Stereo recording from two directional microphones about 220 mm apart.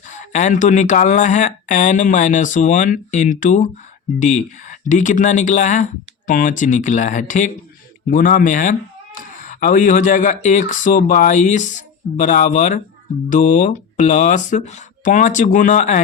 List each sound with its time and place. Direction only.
0.1 s speech: 35° left (ahead or behind)